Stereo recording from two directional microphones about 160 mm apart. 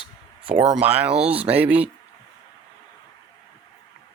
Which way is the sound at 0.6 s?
5° right (ahead or behind).